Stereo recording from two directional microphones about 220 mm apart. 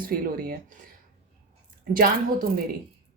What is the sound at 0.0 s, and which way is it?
Speech, 40° right (ahead or behind).